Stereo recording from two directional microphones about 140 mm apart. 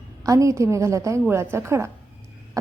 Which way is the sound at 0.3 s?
20° right (ahead or behind).